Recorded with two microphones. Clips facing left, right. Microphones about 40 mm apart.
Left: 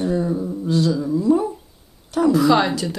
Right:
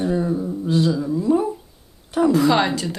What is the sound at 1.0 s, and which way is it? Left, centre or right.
Speech, centre.